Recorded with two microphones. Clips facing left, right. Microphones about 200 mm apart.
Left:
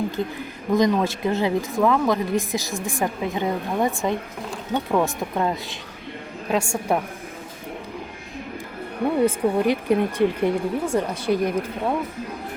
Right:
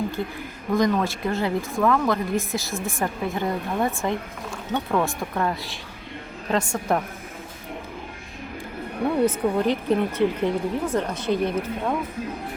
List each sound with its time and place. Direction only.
0.7 s speech: 20° left (ahead or behind)
9.2 s speech: 10° left (ahead or behind)